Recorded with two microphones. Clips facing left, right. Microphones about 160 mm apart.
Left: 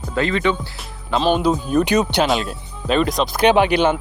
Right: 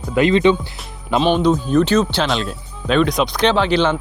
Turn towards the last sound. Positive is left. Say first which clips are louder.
# left 1 dB
turn(degrees=10)  # may be behind; listen again after turning